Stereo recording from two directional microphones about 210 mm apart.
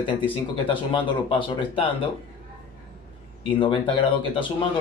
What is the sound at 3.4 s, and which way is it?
Speech, 25° left (ahead or behind).